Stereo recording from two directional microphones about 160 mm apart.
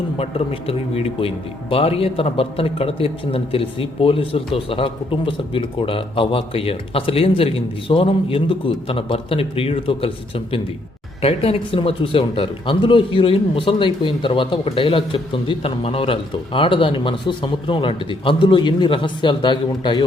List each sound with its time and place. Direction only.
0.2 s a man's voice: 35° left (ahead or behind)